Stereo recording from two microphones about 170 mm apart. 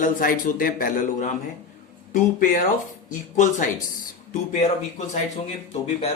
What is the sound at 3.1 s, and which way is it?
Speech, 50° left (ahead or behind).